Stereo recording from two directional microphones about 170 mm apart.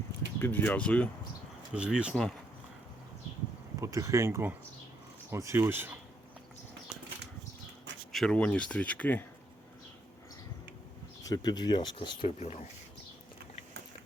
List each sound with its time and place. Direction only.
0.3 s speech: 10° left (ahead or behind)
1.7 s speech: 5° right (ahead or behind)
3.8 s speech: 20° right (ahead or behind)
8.1 s speech: 5° left (ahead or behind)
11.2 s speech: 20° left (ahead or behind)
12.4 s speech: 40° left (ahead or behind)